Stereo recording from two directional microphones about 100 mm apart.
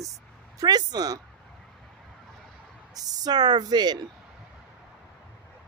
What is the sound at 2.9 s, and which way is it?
A woman's voice, 40° right (ahead or behind).